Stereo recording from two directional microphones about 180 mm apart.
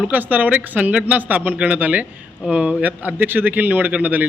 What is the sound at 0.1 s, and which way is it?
A man's voice, 10° right (ahead or behind).